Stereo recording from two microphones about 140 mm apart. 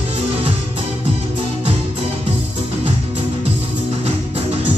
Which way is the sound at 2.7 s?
45° right (ahead or behind).